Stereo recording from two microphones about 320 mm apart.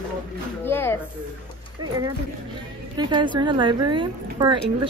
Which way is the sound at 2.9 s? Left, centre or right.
Centre.